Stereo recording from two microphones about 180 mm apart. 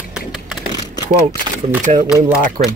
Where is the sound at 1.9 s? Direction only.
40° right (ahead or behind).